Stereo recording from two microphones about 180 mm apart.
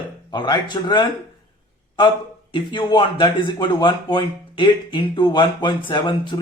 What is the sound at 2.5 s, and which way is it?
A man's voice, 25° left (ahead or behind).